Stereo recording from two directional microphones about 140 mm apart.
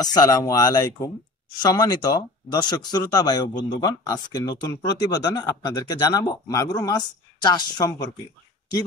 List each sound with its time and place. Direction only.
0.0 s speech: 25° left (ahead or behind)